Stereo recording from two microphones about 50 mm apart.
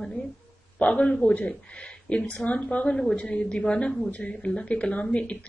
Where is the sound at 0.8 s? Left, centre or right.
Left.